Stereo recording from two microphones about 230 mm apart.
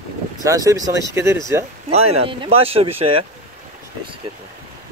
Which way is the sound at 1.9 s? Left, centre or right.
Right.